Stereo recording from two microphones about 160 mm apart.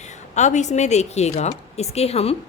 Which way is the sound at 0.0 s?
45° left (ahead or behind).